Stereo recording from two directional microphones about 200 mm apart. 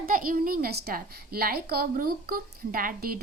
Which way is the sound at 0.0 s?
45° right (ahead or behind).